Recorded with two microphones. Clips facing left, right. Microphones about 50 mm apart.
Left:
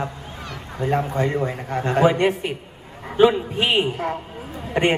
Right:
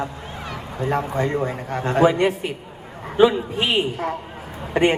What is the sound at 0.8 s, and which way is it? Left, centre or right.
Speech, left.